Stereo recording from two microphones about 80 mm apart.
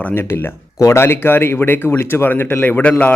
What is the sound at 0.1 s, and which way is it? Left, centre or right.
Speech, left.